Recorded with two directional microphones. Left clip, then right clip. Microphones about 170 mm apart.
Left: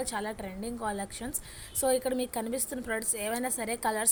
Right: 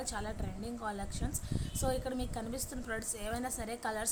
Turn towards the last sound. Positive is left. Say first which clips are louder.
# left 7 dB
turn(degrees=25)  # may be behind; listen again after turning